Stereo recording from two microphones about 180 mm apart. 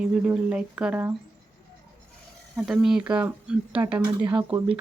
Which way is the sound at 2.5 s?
Centre (ahead or behind).